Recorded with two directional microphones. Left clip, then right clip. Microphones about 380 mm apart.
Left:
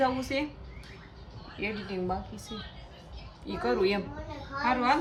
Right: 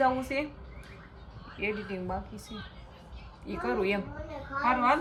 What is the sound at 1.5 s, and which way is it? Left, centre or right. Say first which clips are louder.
Speech: right 1 dB; centre.